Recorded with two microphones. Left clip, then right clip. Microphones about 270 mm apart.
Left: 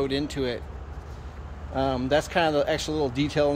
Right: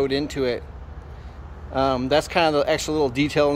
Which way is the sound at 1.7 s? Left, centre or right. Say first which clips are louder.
Right 4 dB; centre.